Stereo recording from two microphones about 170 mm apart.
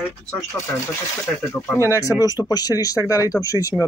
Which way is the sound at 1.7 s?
15° left (ahead or behind).